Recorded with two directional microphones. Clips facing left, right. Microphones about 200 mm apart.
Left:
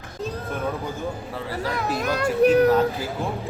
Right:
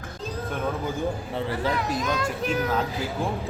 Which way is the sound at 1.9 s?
65° left (ahead or behind).